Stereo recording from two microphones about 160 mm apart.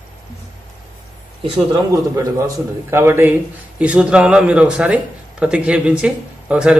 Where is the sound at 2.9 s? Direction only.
15° right (ahead or behind).